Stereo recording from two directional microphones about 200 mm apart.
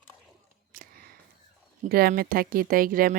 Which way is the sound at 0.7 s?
45° right (ahead or behind).